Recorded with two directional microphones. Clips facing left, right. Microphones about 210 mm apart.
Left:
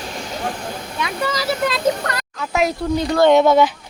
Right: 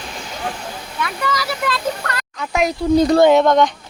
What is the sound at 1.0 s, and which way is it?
Speech, 20° left (ahead or behind).